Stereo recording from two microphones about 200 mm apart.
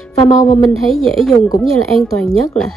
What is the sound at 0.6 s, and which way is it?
Speech, centre (ahead or behind).